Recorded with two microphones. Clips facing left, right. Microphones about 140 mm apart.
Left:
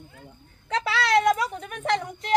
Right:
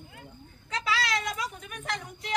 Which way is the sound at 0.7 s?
65° left (ahead or behind).